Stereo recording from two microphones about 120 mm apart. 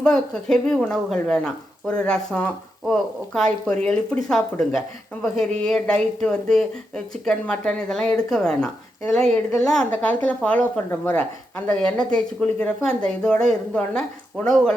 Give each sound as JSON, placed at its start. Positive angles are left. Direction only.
{"t": 0.0, "sound": "speech", "side_deg": 5}